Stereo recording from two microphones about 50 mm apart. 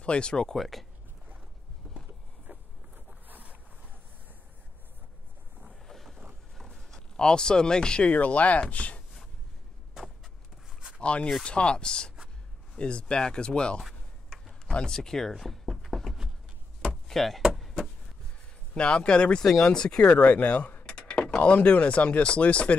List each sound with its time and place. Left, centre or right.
0.0 s speech: centre
0.6 s speech: centre
2.5 s vehicle: right
3.3 s boat: right
5.9 s a sound: centre
8.1 s speech: left
9.9 s walk: centre
11.0 s speech: left
13.8 s a sound: centre
14.7 s a sound: centre
16.9 s chopping: centre
17.6 s a sound: centre
18.8 s speech: centre
20.1 s speech: left